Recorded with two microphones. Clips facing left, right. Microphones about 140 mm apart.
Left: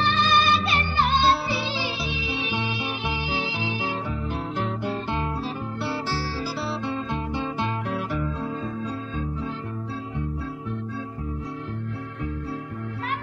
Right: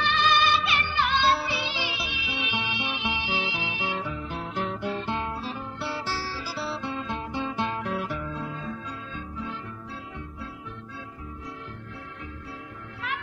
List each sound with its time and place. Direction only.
0.0 s music: 35° left (ahead or behind)